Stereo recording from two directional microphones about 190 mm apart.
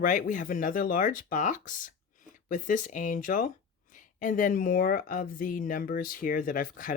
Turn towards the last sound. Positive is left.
turn(degrees=45)  # may be behind; listen again after turning